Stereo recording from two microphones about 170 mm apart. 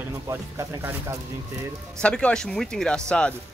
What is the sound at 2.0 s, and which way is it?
Speech, 5° left (ahead or behind).